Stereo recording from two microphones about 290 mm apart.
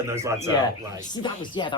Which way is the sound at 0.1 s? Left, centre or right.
Centre.